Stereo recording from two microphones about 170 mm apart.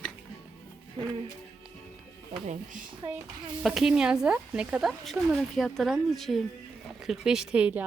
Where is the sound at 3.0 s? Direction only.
15° right (ahead or behind).